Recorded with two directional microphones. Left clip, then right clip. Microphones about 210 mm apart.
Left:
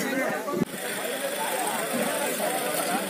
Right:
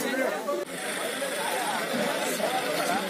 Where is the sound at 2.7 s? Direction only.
50° left (ahead or behind).